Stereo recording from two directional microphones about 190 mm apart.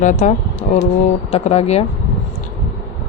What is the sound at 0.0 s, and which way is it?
Speech, 40° left (ahead or behind).